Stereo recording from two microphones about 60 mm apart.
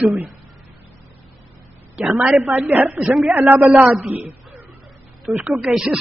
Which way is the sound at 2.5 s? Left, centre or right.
Right.